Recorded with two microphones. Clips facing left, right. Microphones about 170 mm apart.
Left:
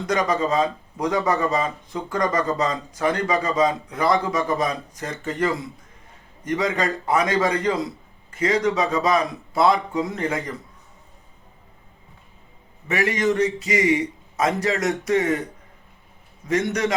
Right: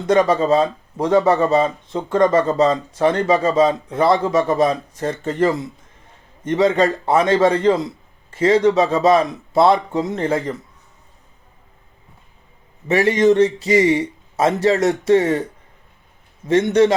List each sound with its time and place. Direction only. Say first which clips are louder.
0.1 s speech: right 7 dB; 30° right (ahead or behind)
12.9 s speech: right 7 dB; 25° right (ahead or behind)
16.5 s speech: right 8 dB; 25° right (ahead or behind)